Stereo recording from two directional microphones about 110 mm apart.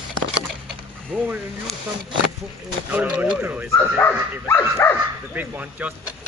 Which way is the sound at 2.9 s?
10° right (ahead or behind).